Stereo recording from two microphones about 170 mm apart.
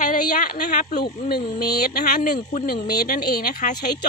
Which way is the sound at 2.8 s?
65° left (ahead or behind).